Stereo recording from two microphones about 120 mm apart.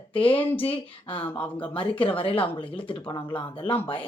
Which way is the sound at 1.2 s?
15° left (ahead or behind).